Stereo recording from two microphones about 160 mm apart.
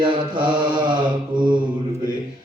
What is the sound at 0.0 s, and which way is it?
Mantra, 30° right (ahead or behind).